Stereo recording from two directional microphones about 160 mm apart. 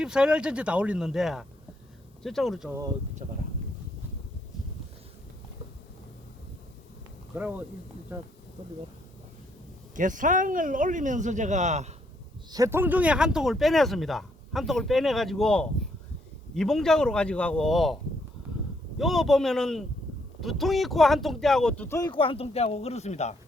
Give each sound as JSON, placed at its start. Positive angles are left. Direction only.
{"t": 0.0, "sound": "speech", "side_deg": -5}
{"t": 3.2, "sound": "speech", "side_deg": -45}
{"t": 7.3, "sound": "speech", "side_deg": -10}
{"t": 9.9, "sound": "speech", "side_deg": -55}
{"t": 12.5, "sound": "speech", "side_deg": -20}
{"t": 18.9, "sound": "speech", "side_deg": 0}
{"t": 21.8, "sound": "speech", "side_deg": 20}
{"t": 22.1, "sound": "speech", "side_deg": 35}